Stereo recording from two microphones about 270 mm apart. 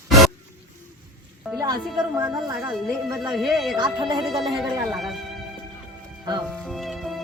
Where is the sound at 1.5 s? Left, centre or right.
Centre.